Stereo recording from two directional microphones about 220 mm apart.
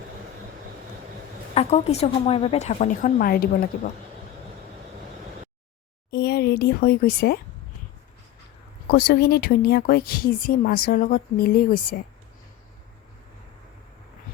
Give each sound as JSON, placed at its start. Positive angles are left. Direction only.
{"t": 1.5, "sound": "a woman's voice", "side_deg": 30}
{"t": 6.1, "sound": "a sound", "side_deg": 45}
{"t": 8.9, "sound": "speech", "side_deg": 45}